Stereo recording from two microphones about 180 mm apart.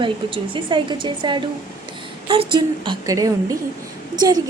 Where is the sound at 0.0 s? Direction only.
30° right (ahead or behind).